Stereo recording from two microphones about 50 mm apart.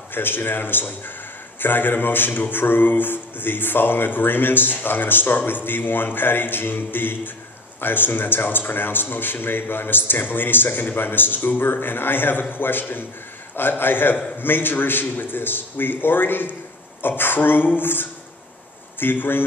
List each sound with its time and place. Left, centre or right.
0.1 s speech: left